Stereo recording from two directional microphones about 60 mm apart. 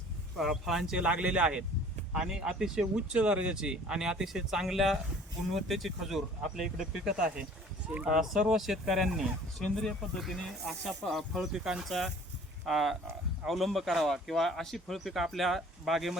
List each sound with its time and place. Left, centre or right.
0.3 s speech: centre
0.9 s speech: centre
8.1 s speech: centre